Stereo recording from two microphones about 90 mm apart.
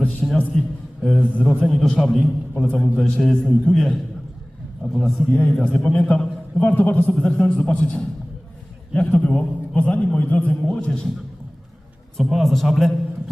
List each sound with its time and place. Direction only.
0.0 s a sound: 15° left (ahead or behind)
1.0 s a man's voice: 10° left (ahead or behind)
1.6 s a man's voice: centre (ahead or behind)
5.4 s a man's voice: 15° left (ahead or behind)
7.1 s a man's voice: 10° left (ahead or behind)
12.1 s a man's voice: 5° left (ahead or behind)